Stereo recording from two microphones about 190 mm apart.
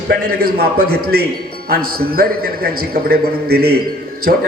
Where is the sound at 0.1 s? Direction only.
60° right (ahead or behind).